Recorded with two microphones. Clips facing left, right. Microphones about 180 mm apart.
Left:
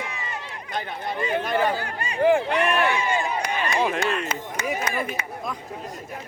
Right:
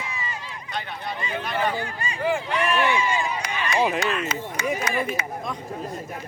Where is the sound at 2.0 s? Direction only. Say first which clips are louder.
Left 9 dB; 60° left (ahead or behind).